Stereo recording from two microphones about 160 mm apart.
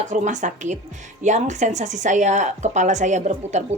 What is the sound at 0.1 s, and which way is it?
A woman's voice, 50° right (ahead or behind).